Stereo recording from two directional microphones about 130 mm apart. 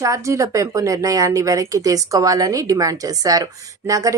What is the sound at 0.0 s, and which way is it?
Speech, 25° right (ahead or behind).